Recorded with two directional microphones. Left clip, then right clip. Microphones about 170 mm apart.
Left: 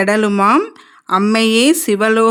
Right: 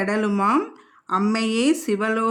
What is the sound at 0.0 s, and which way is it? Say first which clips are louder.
Speech: left 9 dB; 40° left (ahead or behind).